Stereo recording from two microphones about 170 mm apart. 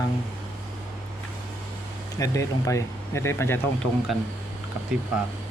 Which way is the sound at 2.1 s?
20° left (ahead or behind).